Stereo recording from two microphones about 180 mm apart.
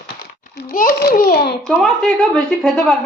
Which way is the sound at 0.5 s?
55° left (ahead or behind).